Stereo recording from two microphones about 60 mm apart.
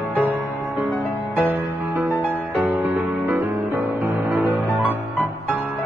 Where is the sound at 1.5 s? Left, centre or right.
Right.